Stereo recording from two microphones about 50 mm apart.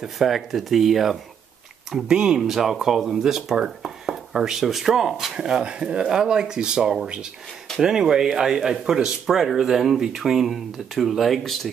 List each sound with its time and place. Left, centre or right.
0.0 s speech: centre